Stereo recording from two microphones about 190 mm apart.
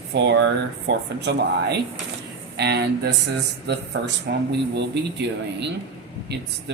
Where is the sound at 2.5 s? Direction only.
60° right (ahead or behind).